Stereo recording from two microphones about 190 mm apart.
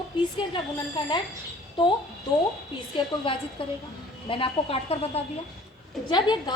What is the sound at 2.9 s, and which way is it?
A woman's voice, 25° left (ahead or behind).